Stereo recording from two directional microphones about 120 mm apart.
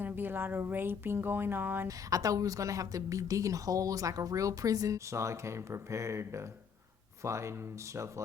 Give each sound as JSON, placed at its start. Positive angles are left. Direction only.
{"t": 0.0, "sound": "speech", "side_deg": -15}
{"t": 1.9, "sound": "a woman's voice", "side_deg": -30}